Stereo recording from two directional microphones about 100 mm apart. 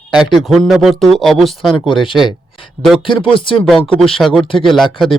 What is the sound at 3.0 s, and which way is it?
Speech, 60° left (ahead or behind).